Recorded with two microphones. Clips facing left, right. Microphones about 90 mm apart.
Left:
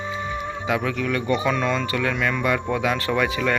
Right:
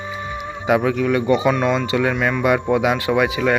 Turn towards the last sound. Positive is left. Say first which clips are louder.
# right 4 dB
turn(degrees=-15)  # may be behind; listen again after turning